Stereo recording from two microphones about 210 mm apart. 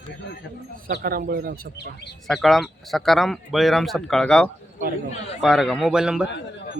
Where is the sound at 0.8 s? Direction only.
45° right (ahead or behind).